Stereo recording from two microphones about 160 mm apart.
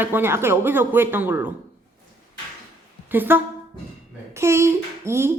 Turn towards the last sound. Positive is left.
turn(degrees=-15)  # may be behind; listen again after turning